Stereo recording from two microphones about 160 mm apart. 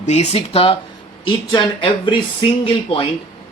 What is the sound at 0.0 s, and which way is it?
Speech, 45° left (ahead or behind).